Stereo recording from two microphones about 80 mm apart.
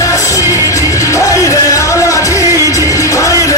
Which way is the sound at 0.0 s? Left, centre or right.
Left.